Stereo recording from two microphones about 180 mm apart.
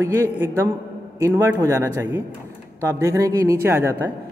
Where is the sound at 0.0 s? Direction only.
15° right (ahead or behind).